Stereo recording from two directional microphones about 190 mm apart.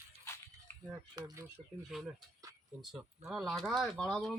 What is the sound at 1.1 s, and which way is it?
Speech, 20° right (ahead or behind).